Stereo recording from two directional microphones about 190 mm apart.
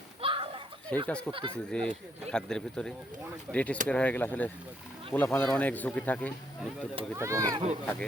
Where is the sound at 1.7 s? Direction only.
5° left (ahead or behind).